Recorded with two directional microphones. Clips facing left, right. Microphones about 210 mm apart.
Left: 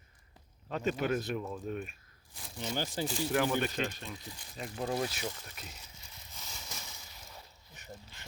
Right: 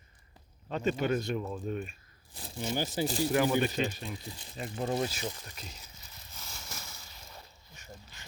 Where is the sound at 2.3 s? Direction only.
35° right (ahead or behind).